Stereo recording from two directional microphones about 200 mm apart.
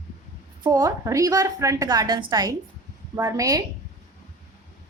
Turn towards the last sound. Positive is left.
turn(degrees=-15)  # may be behind; listen again after turning